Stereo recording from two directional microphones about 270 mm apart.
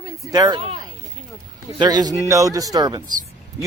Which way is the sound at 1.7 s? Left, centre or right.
Centre.